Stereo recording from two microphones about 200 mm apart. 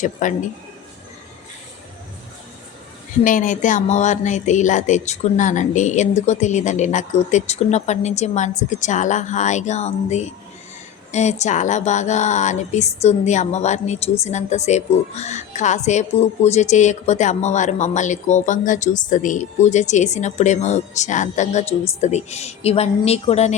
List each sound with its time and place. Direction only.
0.0 s speech: 40° left (ahead or behind)
3.2 s speech: 40° left (ahead or behind)